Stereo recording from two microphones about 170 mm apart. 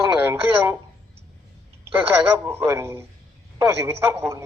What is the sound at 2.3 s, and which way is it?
A man's voice, 15° right (ahead or behind).